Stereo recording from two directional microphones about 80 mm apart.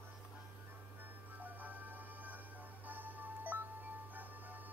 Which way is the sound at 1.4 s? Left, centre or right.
Right.